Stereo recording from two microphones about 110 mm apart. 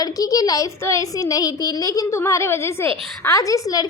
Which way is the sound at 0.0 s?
35° left (ahead or behind).